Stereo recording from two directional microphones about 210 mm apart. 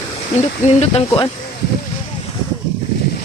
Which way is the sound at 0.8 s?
30° left (ahead or behind).